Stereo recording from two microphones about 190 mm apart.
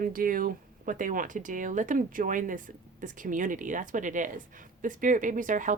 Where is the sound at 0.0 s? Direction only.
50° right (ahead or behind).